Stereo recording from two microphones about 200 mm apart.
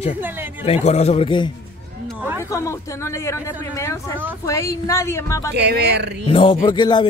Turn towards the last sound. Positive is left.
turn(degrees=20)  # may be behind; listen again after turning